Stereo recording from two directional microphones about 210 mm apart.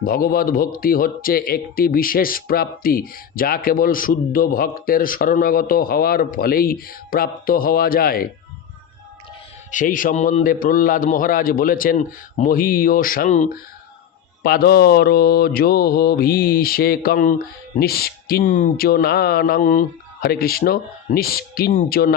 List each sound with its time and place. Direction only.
0.0 s speech: 45° left (ahead or behind)
9.7 s a man's voice: 40° left (ahead or behind)
14.4 s speech: 50° left (ahead or behind)